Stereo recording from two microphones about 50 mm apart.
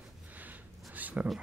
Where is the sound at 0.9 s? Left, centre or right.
Right.